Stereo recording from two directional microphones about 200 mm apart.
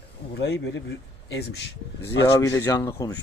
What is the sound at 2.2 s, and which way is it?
Speech, 15° left (ahead or behind).